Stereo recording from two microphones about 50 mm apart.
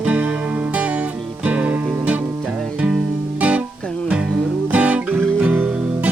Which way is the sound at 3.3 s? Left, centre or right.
Right.